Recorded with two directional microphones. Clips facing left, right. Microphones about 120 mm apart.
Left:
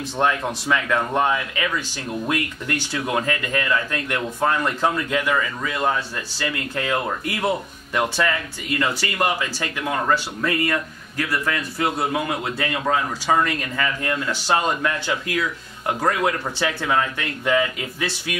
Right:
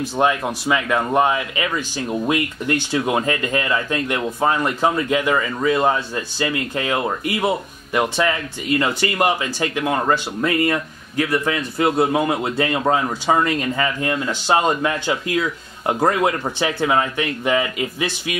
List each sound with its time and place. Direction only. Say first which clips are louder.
0.2 s speech: right 2 dB; 15° right (ahead or behind)